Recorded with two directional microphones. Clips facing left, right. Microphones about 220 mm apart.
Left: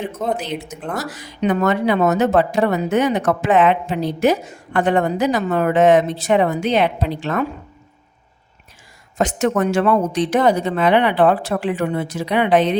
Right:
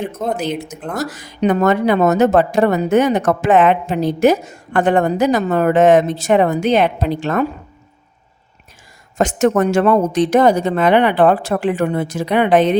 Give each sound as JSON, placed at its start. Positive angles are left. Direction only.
{"t": 0.9, "sound": "a woman's voice", "side_deg": -45}
{"t": 9.1, "sound": "a woman's voice", "side_deg": -45}